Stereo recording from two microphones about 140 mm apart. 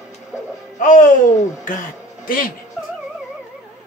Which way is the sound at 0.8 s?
70° left (ahead or behind).